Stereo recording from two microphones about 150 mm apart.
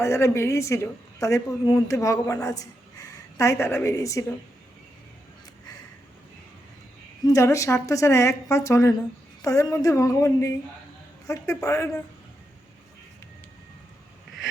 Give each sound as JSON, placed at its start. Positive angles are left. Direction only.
{"t": 0.0, "sound": "a woman's voice", "side_deg": 20}
{"t": 7.3, "sound": "a woman's voice", "side_deg": 20}